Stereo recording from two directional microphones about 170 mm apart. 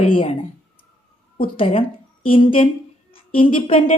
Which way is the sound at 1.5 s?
30° left (ahead or behind).